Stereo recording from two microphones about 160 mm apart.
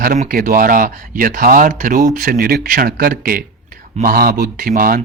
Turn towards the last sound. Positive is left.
turn(degrees=-65)  # may be behind; listen again after turning